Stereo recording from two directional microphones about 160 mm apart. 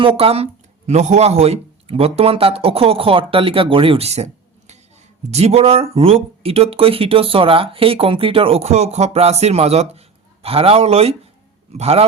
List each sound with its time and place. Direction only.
0.0 s speech: 35° right (ahead or behind)